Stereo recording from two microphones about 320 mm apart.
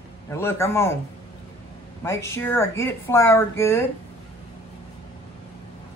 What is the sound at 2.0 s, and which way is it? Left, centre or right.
A man's voice, centre.